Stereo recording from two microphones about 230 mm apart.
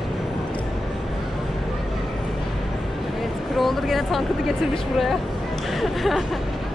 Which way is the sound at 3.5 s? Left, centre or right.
Centre.